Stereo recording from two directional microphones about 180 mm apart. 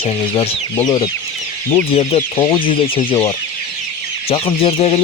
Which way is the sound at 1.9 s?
35° left (ahead or behind).